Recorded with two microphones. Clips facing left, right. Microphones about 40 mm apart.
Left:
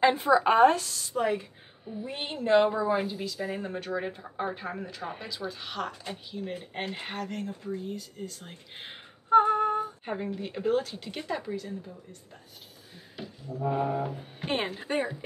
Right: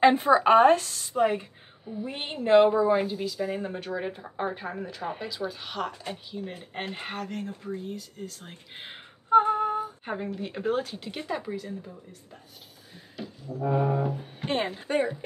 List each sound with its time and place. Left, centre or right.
0.0 s speech: right
1.9 s a woman's voice: centre
2.1 s a woman's voice: centre
13.6 s a woman's voice: centre